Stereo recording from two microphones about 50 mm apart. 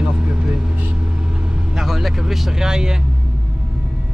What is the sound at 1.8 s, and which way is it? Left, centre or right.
Speech, centre.